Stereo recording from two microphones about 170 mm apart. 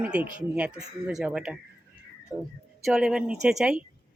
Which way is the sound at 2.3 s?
15° right (ahead or behind).